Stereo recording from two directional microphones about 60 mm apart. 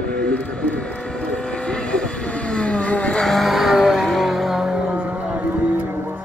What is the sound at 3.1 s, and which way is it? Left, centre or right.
Vehicle, centre.